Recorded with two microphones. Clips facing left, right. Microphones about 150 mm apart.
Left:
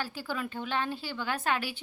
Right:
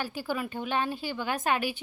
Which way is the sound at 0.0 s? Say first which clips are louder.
Right 3 dB; 15° right (ahead or behind).